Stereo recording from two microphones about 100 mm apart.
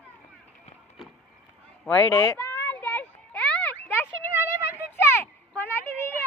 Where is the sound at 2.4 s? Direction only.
20° left (ahead or behind).